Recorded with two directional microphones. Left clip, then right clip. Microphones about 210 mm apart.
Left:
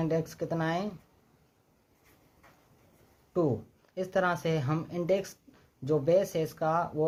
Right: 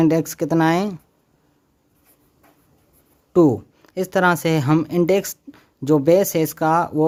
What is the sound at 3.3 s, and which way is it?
Speech, 50° right (ahead or behind).